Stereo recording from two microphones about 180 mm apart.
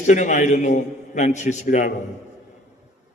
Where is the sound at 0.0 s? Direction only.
40° left (ahead or behind).